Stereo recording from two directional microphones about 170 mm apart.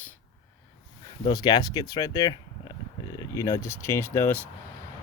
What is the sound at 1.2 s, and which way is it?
Speech, 25° left (ahead or behind).